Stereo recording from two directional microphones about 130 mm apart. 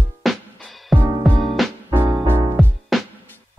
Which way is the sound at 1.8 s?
25° right (ahead or behind).